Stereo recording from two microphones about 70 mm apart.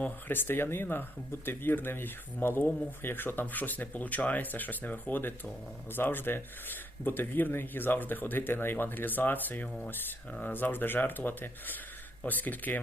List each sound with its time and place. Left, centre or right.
0.3 s speech: left